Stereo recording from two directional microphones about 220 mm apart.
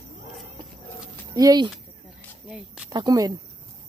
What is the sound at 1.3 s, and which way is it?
Speech, 15° right (ahead or behind).